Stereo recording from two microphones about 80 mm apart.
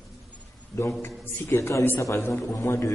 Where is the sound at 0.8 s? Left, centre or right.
Left.